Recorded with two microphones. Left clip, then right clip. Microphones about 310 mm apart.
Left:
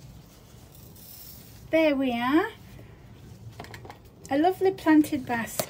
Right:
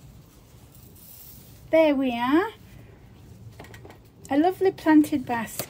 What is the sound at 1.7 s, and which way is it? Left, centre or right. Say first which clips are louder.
Speech: right 3 dB; centre.